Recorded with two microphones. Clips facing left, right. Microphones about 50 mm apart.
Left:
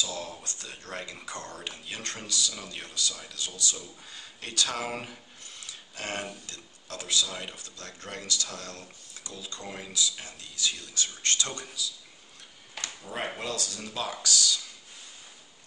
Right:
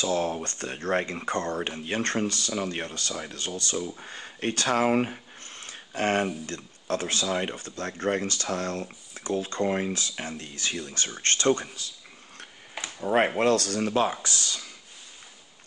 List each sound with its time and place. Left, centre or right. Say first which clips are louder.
0.0 s speech: right 9 dB; right
13.0 s speech: right 13 dB; right